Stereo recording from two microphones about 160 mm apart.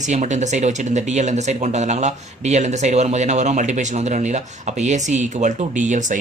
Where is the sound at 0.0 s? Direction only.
50° right (ahead or behind).